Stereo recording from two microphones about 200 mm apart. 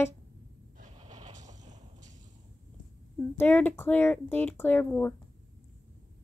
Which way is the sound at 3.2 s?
10° left (ahead or behind).